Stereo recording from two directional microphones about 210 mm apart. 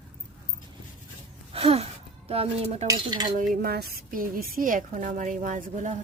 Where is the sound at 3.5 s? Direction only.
50° right (ahead or behind).